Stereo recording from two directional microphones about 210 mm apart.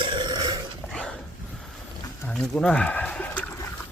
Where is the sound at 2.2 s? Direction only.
5° left (ahead or behind).